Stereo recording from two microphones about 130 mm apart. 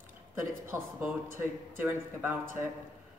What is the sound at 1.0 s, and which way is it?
A woman's voice, 15° right (ahead or behind).